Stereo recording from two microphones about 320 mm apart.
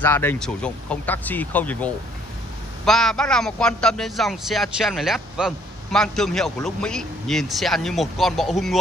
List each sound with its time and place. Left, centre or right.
0.0 s a man's voice: centre